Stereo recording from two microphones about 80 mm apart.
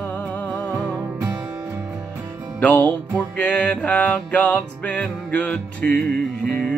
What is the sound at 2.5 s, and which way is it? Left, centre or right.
Music, centre.